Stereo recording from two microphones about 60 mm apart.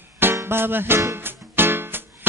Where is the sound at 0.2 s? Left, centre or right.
Right.